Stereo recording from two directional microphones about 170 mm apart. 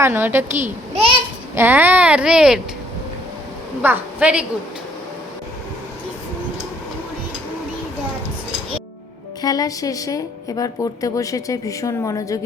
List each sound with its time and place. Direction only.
0.0 s a child's voice: 15° right (ahead or behind)
3.8 s a child's voice: 5° right (ahead or behind)
9.4 s speech: 20° left (ahead or behind)